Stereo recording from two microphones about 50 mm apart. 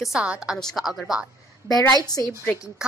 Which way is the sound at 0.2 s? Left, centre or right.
Right.